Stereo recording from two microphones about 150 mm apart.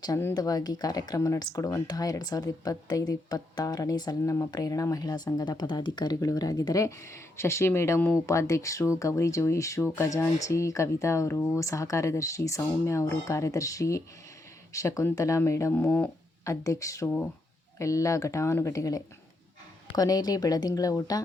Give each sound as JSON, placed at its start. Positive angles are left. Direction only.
{"t": 0.0, "sound": "speech", "side_deg": 20}
{"t": 16.4, "sound": "speech", "side_deg": 20}